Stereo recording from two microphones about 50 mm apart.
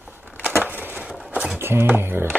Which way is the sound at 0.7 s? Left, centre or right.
Right.